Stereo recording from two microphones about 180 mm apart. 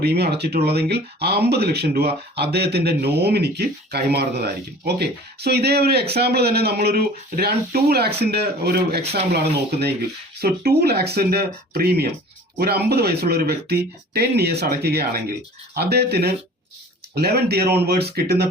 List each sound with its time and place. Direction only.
0.0 s speech: 60° right (ahead or behind)
10.4 s speech: 60° right (ahead or behind)